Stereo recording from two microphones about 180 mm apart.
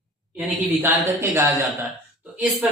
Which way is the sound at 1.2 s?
15° right (ahead or behind).